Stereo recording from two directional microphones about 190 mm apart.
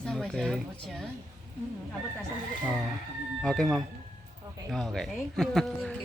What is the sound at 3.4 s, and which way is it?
Speech, centre (ahead or behind).